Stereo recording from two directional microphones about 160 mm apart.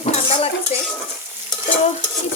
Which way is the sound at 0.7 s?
45° left (ahead or behind).